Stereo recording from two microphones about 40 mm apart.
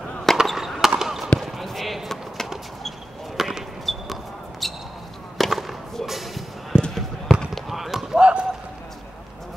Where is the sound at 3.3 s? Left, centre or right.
Centre.